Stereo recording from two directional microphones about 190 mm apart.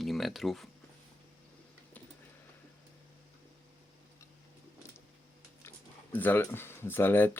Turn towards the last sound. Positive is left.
turn(degrees=10)  # may be behind; listen again after turning